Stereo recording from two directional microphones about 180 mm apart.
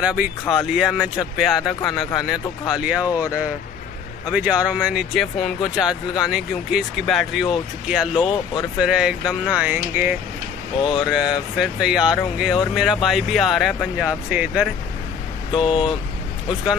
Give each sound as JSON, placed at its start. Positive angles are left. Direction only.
{"t": 0.0, "sound": "speech", "side_deg": -5}
{"t": 8.1, "sound": "speech", "side_deg": 25}
{"t": 8.7, "sound": "speech", "side_deg": -5}
{"t": 10.8, "sound": "speech", "side_deg": 25}
{"t": 11.1, "sound": "speech", "side_deg": 0}
{"t": 15.5, "sound": "speech", "side_deg": 30}